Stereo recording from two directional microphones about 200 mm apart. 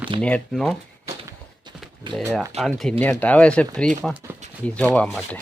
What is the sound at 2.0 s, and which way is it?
Speech, 25° right (ahead or behind).